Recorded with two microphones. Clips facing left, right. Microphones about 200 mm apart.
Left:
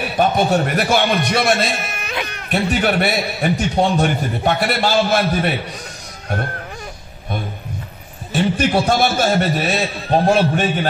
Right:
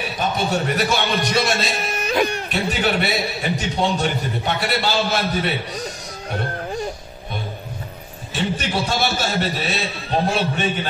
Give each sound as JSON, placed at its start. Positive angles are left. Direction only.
{"t": 0.2, "sound": "a man's voice", "side_deg": 55}
{"t": 2.0, "sound": "music", "side_deg": -35}
{"t": 2.5, "sound": "a man's voice", "side_deg": 55}
{"t": 8.3, "sound": "a man's voice", "side_deg": 50}